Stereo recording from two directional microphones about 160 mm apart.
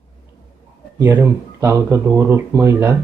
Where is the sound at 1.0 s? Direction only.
15° right (ahead or behind).